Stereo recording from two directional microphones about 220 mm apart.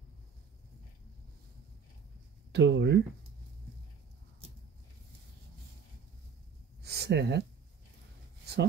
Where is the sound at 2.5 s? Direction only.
55° right (ahead or behind).